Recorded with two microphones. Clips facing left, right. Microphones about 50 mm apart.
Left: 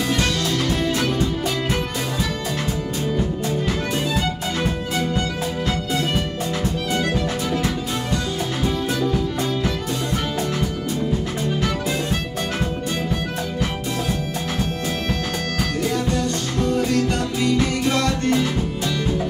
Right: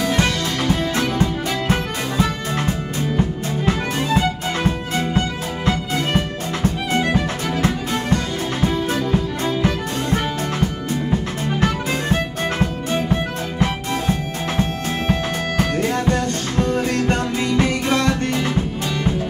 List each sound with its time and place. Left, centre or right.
0.9 s music: right
6.9 s music: right
9.6 s music: right
14.6 s music: right